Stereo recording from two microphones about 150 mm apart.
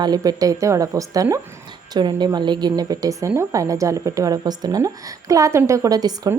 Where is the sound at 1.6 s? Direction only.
30° right (ahead or behind).